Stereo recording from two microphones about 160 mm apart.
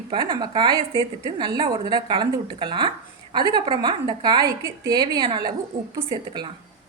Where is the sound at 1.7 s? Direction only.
30° right (ahead or behind).